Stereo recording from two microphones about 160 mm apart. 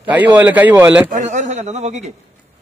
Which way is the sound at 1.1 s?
50° right (ahead or behind).